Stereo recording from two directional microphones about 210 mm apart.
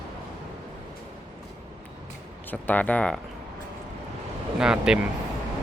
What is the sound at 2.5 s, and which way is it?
Speech, 10° left (ahead or behind).